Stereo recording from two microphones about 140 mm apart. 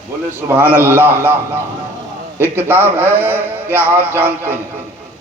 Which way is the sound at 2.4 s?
15° right (ahead or behind).